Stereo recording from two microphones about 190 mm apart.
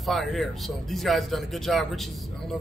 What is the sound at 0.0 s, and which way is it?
A man's voice, centre (ahead or behind).